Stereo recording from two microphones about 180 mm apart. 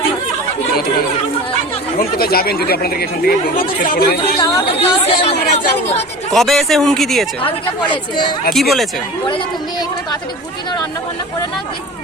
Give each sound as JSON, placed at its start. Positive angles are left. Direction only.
{"t": 2.0, "sound": "speech", "side_deg": 55}
{"t": 4.7, "sound": "speech", "side_deg": 35}
{"t": 6.3, "sound": "speech", "side_deg": 0}
{"t": 7.4, "sound": "speech", "side_deg": 25}
{"t": 8.5, "sound": "speech", "side_deg": 0}